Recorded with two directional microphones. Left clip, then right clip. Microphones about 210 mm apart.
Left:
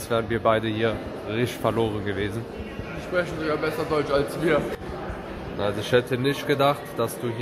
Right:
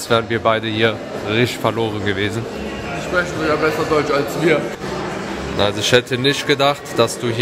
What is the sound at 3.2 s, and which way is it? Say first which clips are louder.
A man's voice: right 7 dB; 50° left (ahead or behind).